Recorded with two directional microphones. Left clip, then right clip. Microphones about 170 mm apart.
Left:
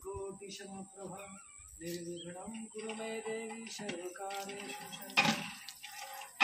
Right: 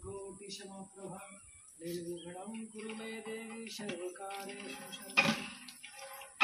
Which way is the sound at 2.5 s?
40° left (ahead or behind).